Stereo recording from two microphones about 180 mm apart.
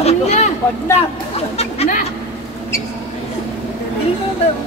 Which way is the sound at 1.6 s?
40° left (ahead or behind).